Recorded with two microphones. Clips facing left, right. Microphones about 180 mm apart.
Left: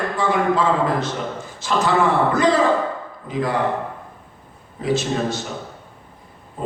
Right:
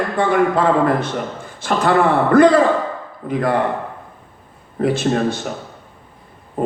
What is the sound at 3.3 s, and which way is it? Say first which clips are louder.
Speech: right 4 dB; 55° right (ahead or behind).